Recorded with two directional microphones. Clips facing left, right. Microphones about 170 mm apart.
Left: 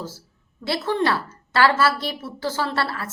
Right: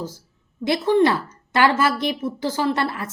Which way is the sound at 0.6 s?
15° right (ahead or behind).